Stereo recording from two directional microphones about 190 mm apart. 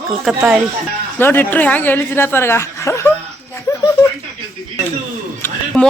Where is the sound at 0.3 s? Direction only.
5° right (ahead or behind).